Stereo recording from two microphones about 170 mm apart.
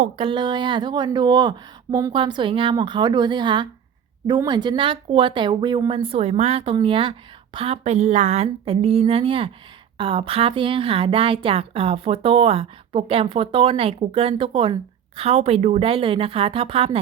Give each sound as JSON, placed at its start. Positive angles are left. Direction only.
{"t": 0.2, "sound": "a woman's voice", "side_deg": -30}